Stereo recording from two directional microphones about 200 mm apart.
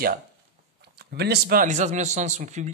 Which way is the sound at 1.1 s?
50° right (ahead or behind).